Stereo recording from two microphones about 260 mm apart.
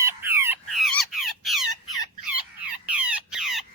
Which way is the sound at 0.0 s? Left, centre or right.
Centre.